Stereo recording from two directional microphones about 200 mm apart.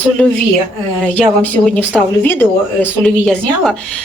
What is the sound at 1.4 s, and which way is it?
Speech, 5° left (ahead or behind).